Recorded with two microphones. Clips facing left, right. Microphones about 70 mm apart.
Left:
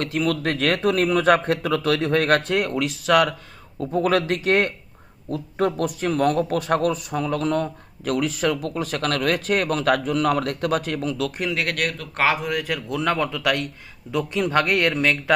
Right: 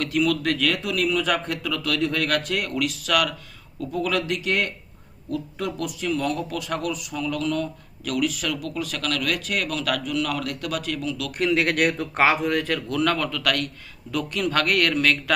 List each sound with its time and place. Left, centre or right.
0.0 s speech: left
11.5 s a man's voice: centre; by 15.2 s left